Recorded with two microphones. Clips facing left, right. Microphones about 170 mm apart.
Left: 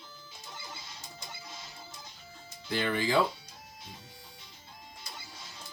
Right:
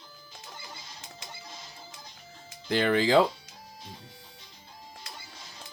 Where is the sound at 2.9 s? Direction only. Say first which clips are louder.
Right 7 dB; 90° right.